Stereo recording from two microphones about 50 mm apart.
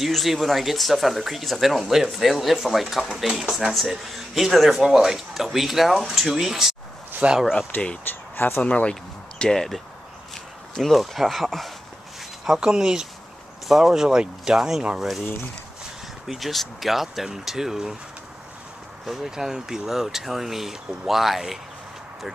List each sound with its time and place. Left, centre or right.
0.0 s speech: centre
7.2 s speech: right
7.7 s speech: left
8.1 s speech: left
8.6 s speech: left
9.4 s speech: centre
12.4 s speech: centre
15.0 s speech: centre
16.3 s speech: centre
19.0 s speech: centre